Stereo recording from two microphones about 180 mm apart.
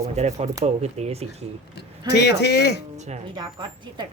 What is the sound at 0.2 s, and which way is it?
Speech, 40° right (ahead or behind).